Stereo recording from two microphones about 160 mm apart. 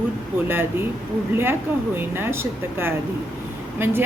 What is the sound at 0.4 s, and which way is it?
Speech, 15° right (ahead or behind).